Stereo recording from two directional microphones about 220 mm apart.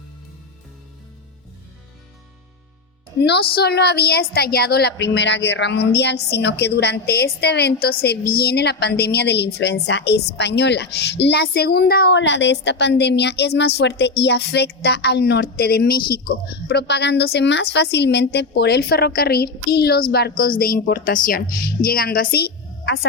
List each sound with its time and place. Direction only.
3.2 s a woman's voice: 50° left (ahead or behind)